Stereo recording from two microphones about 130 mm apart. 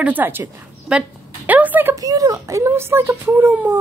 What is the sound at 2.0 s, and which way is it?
Speech, 25° right (ahead or behind).